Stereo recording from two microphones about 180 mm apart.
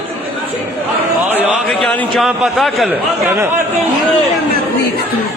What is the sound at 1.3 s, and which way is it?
A man's voice, centre (ahead or behind).